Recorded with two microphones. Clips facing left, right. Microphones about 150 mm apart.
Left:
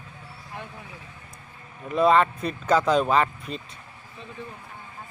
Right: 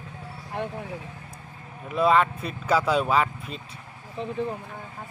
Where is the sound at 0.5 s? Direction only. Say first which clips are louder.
Right 9 dB; 60° right (ahead or behind).